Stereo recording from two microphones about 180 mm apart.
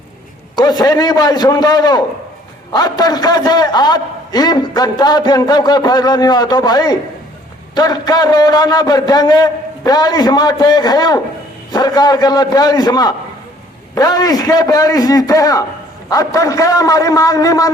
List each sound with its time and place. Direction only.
0.5 s a man's voice: 20° left (ahead or behind)